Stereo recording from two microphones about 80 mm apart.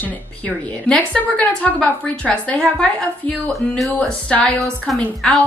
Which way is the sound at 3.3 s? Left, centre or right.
Centre.